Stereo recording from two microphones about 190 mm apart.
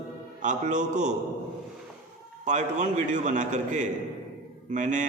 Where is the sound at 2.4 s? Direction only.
40° right (ahead or behind).